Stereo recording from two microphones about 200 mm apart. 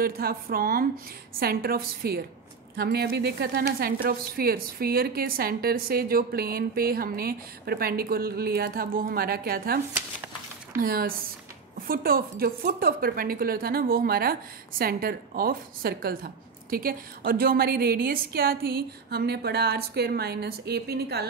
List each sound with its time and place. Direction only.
0.0 s a woman's voice: 50° right (ahead or behind)
10.8 s a woman's voice: 50° right (ahead or behind)